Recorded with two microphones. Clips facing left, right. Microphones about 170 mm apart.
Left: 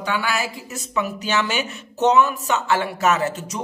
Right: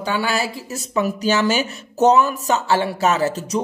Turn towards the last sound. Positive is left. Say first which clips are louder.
# right 4 dB
turn(degrees=-35)  # may be behind; listen again after turning